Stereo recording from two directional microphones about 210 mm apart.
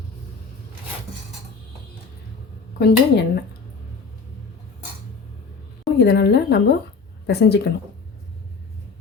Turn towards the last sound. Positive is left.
turn(degrees=50)  # may be behind; listen again after turning